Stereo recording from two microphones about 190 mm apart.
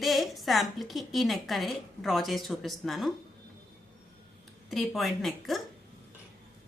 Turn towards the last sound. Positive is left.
turn(degrees=0)  # may be behind; listen again after turning